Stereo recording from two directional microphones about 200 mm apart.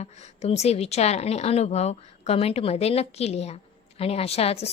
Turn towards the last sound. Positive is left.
turn(degrees=30)  # may be behind; listen again after turning